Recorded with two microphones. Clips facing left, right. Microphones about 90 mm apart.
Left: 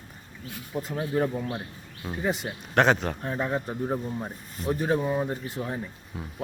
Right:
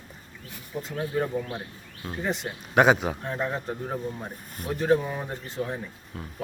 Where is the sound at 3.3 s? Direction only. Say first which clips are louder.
Left 1 dB; 5° left (ahead or behind).